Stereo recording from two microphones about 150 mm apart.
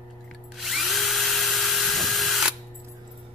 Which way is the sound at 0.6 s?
Centre (ahead or behind).